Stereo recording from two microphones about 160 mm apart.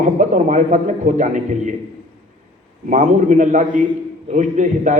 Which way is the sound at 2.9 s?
50° right (ahead or behind).